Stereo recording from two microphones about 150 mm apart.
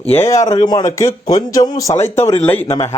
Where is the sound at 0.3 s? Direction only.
20° left (ahead or behind).